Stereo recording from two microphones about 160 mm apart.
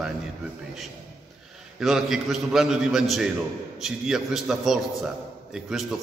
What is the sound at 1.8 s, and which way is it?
A man's voice, centre (ahead or behind).